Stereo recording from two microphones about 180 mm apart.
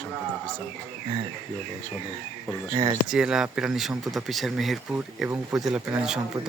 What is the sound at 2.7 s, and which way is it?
Speech, 25° right (ahead or behind).